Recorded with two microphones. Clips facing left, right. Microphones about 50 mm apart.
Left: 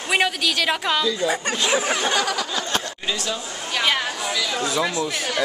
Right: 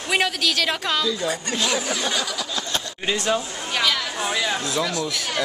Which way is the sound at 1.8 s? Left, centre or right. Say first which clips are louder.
Left 3 dB; left.